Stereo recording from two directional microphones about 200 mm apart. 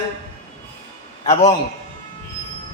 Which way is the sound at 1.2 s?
30° left (ahead or behind).